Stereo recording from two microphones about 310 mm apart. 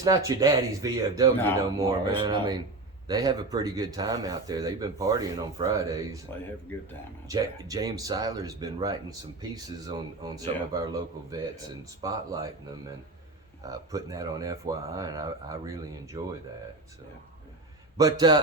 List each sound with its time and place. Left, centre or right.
0.0 s speech: centre
7.3 s speech: centre
13.6 s speech: centre
17.9 s a man's voice: centre